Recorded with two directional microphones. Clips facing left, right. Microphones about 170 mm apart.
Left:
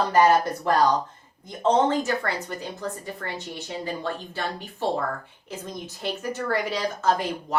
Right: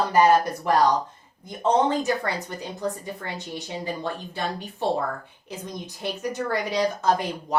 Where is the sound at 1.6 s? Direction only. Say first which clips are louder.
Even; 15° right (ahead or behind).